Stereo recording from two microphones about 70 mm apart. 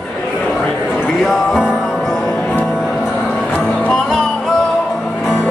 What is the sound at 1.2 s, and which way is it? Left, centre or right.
Music, centre.